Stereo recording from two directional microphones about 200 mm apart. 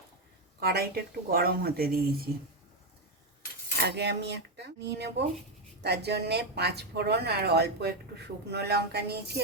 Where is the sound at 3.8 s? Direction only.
55° right (ahead or behind).